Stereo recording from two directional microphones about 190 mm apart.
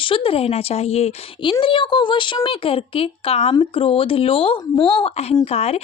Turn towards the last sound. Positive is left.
turn(degrees=35)  # may be behind; listen again after turning